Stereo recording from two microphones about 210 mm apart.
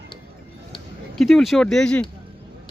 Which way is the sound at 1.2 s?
Centre (ahead or behind).